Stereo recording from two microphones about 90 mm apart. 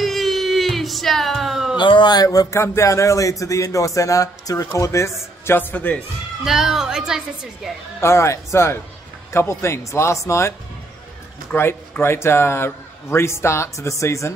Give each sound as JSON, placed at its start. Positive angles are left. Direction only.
{"t": 0.0, "sound": "a sound", "side_deg": 0}
{"t": 1.8, "sound": "a sound", "side_deg": 60}
{"t": 2.6, "sound": "a man's voice", "side_deg": 30}
{"t": 6.4, "sound": "a woman's voice", "side_deg": -5}
{"t": 8.0, "sound": "speech", "side_deg": 30}
{"t": 11.5, "sound": "a man's voice", "side_deg": 25}